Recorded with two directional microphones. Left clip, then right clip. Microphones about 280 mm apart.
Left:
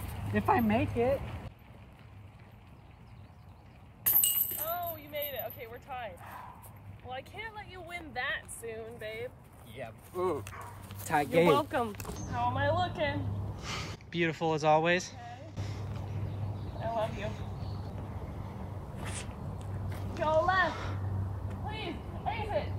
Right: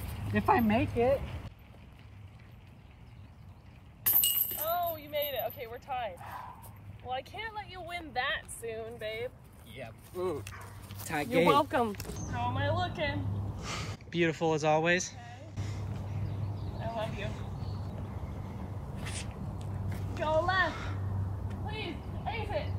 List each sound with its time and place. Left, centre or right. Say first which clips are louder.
0.3 s speech: right 1 dB; centre
4.0 s a sound: right 1 dB; centre
4.7 s dog: right 6 dB; centre
7.1 s speech: right 4 dB; centre
9.7 s speech: left 2 dB; centre
11.4 s speech: right 1 dB; right
12.4 s speech: left 3 dB; centre
16.8 s speech: left 3 dB; centre
18.9 s a sound: even; centre
20.2 s a woman's voice: left 1 dB; centre
21.6 s a sound: even; centre